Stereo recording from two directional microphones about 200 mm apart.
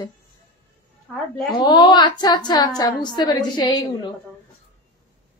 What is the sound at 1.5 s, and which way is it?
A woman's voice, 20° left (ahead or behind).